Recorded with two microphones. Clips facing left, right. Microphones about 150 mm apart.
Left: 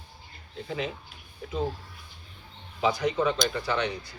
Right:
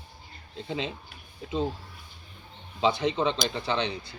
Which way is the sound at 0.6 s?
25° right (ahead or behind).